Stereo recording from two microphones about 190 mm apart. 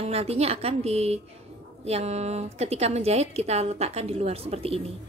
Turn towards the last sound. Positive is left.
turn(degrees=-30)  # may be behind; listen again after turning